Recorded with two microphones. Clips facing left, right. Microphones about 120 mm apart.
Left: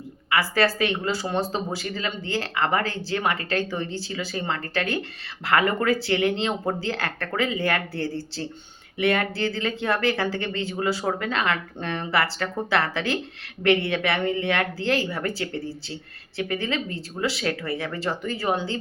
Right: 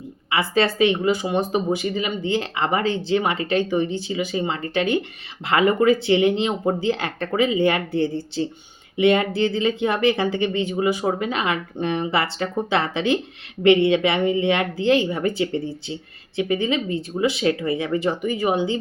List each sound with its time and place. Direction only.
0.3 s speech: 20° right (ahead or behind)